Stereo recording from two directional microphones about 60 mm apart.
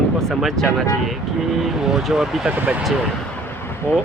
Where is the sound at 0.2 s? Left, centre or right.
Centre.